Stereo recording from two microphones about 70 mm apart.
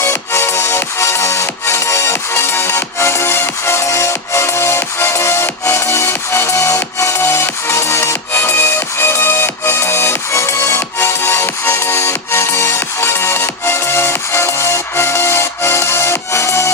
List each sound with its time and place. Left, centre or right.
0.0 s music: left